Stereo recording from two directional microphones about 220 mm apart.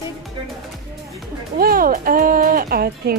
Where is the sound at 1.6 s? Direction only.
40° right (ahead or behind).